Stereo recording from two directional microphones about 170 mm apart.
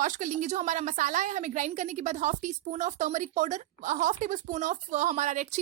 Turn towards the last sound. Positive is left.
turn(degrees=-45)  # may be behind; listen again after turning